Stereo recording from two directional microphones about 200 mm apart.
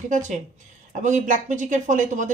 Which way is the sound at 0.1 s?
40° right (ahead or behind).